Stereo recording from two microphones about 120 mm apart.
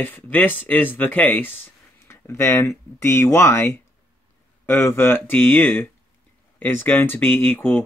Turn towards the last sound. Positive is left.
turn(degrees=10)  # may be behind; listen again after turning